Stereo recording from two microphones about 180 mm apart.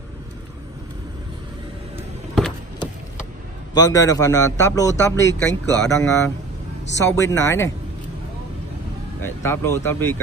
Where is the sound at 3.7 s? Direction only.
20° left (ahead or behind).